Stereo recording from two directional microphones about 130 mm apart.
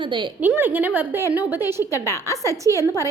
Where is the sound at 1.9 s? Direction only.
20° left (ahead or behind).